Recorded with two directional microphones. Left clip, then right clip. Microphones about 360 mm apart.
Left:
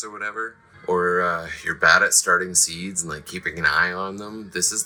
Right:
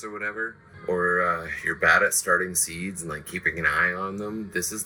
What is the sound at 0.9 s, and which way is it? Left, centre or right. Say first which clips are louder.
Speech: left 3 dB; left.